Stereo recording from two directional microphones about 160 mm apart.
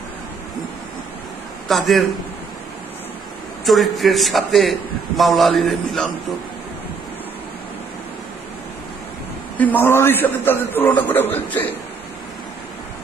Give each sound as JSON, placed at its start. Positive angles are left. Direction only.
{"t": 1.6, "sound": "a man's voice", "side_deg": 0}
{"t": 3.7, "sound": "a man's voice", "side_deg": 0}
{"t": 9.6, "sound": "a man's voice", "side_deg": 10}